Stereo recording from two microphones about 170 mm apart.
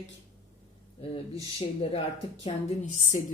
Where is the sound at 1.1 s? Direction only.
35° left (ahead or behind).